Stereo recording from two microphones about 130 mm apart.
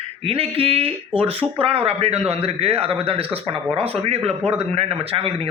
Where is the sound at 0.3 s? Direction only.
45° right (ahead or behind).